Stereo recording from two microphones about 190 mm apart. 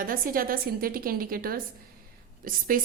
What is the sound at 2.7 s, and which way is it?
Speech, 45° right (ahead or behind).